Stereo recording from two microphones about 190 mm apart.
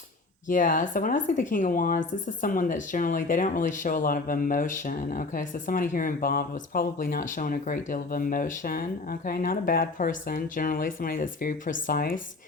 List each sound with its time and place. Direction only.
0.4 s a woman's voice: 45° left (ahead or behind)